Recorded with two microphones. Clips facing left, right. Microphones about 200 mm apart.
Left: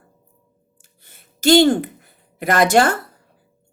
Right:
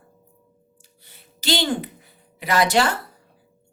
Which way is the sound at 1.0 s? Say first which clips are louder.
Left 10 dB; 50° left (ahead or behind).